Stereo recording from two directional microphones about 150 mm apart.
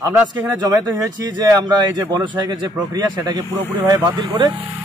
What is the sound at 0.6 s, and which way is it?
Speech, 25° right (ahead or behind).